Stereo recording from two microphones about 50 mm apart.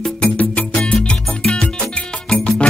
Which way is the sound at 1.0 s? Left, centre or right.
Centre.